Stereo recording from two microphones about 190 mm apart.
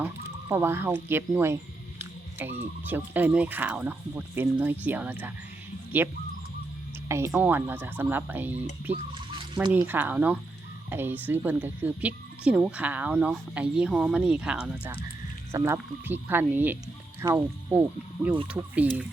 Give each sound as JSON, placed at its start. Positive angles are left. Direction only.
{"t": 0.0, "sound": "speech", "side_deg": -15}
{"t": 7.3, "sound": "speech", "side_deg": -5}
{"t": 8.9, "sound": "a sound", "side_deg": -35}
{"t": 9.8, "sound": "speech", "side_deg": -10}